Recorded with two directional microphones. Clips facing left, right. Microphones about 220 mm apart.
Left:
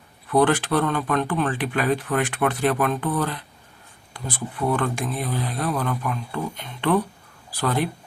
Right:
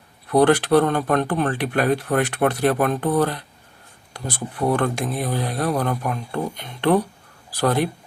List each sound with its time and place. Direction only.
0.3 s speech: 40° right (ahead or behind)
7.5 s speech: 40° right (ahead or behind)